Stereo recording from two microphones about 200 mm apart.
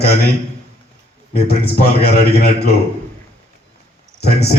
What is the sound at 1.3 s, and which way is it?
A man's voice, 50° left (ahead or behind).